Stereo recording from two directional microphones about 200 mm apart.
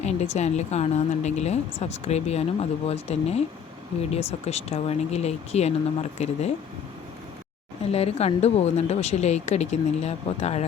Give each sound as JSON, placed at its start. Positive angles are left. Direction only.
{"t": 0.0, "sound": "speech", "side_deg": 35}
{"t": 7.9, "sound": "speech", "side_deg": 30}